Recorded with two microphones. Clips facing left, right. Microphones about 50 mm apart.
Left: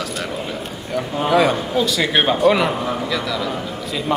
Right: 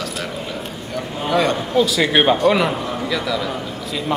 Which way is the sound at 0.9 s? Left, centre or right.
Centre.